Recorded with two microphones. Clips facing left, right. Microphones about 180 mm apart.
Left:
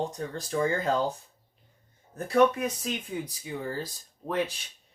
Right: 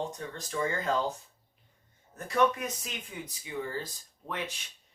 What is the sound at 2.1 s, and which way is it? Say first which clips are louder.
Speech: left 5 dB; 35° left (ahead or behind).